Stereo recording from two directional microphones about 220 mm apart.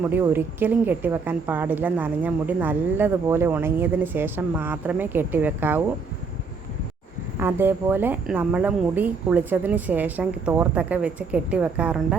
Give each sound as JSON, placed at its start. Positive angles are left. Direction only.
{"t": 0.0, "sound": "speech", "side_deg": -10}
{"t": 7.3, "sound": "speech", "side_deg": -10}